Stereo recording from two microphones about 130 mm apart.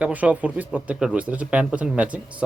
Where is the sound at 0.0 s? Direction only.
10° right (ahead or behind).